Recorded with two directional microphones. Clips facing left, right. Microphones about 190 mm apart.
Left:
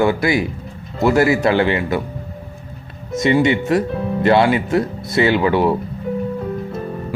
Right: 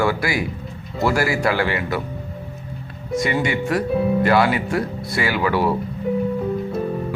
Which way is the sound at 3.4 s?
25° left (ahead or behind).